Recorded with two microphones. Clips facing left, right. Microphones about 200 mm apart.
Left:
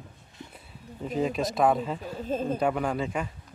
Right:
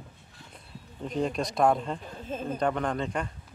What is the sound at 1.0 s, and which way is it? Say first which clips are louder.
Speech: left 2 dB; 5° left (ahead or behind).